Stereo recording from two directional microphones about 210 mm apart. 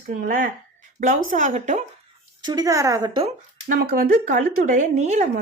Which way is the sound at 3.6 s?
45° right (ahead or behind).